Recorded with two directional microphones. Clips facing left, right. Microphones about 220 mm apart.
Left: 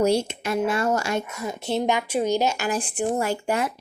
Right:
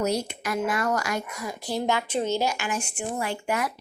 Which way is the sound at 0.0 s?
30° left (ahead or behind).